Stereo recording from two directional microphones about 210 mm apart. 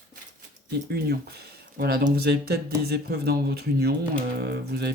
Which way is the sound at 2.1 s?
50° right (ahead or behind).